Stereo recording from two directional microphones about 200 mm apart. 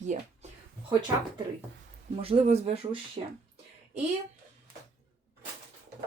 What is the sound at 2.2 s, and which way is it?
Speech, 30° right (ahead or behind).